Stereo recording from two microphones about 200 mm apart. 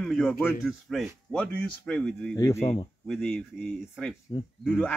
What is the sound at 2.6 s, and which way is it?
Speech, 30° left (ahead or behind).